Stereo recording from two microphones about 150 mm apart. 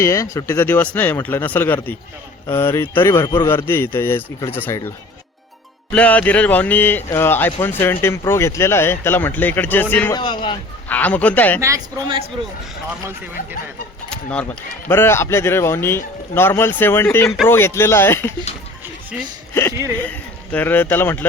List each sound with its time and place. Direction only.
0.0 s speech: 20° left (ahead or behind)
10.1 s a man's voice: 30° left (ahead or behind)
10.8 s speech: 10° left (ahead or behind)
14.1 s speech: 10° left (ahead or behind)
20.0 s speech: 10° left (ahead or behind)